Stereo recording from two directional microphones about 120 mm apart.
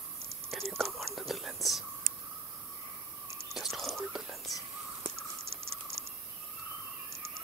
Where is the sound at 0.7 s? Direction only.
5° left (ahead or behind).